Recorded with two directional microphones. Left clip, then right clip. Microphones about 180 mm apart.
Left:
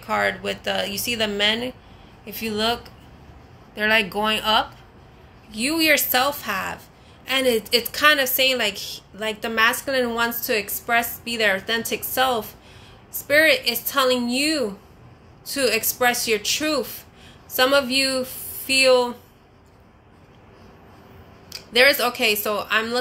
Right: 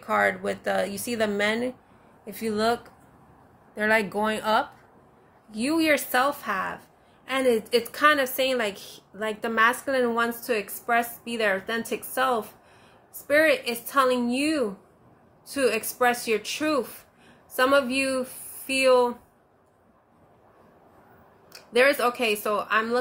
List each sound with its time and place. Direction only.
0.0 s a woman's voice: 30° right (ahead or behind); by 19.1 s 15° right (ahead or behind)
21.5 s a woman's voice: 15° right (ahead or behind)